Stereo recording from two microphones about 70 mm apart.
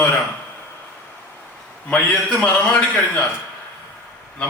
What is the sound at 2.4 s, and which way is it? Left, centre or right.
Speech, centre.